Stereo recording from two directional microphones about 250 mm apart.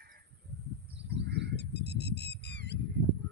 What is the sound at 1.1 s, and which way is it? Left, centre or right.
Crow, right.